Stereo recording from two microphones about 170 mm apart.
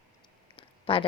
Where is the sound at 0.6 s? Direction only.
30° left (ahead or behind).